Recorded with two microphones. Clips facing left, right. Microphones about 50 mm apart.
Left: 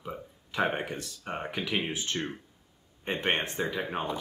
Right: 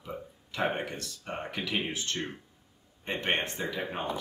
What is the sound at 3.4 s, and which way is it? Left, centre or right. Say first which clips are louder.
Speech: left 2 dB; centre.